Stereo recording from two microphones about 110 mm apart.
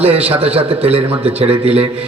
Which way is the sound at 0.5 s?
65° right (ahead or behind).